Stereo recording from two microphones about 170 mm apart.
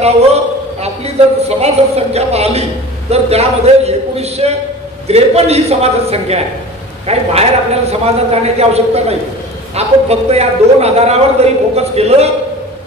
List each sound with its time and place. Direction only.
0.0 s a man's voice: 40° right (ahead or behind)